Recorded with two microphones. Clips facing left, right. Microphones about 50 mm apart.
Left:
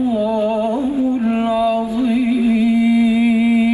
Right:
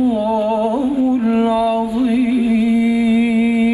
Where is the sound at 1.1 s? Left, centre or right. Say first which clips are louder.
Right 2 dB; centre.